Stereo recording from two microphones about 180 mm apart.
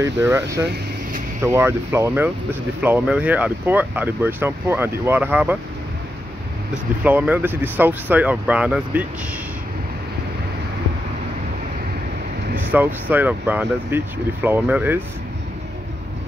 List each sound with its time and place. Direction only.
0.0 s speech: 15° right (ahead or behind)
7.0 s speech: 10° right (ahead or behind)
12.7 s speech: 10° right (ahead or behind)